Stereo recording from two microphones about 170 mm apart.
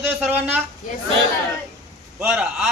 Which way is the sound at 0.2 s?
10° right (ahead or behind).